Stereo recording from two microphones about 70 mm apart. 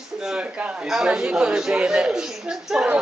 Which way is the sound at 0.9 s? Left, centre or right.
Centre.